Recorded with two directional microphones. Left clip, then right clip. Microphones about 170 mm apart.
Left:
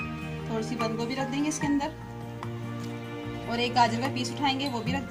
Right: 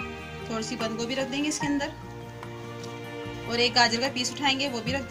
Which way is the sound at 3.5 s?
15° left (ahead or behind).